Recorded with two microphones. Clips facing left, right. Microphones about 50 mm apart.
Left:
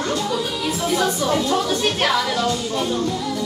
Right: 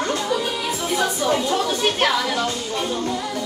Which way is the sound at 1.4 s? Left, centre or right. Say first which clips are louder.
Left 1 dB; centre.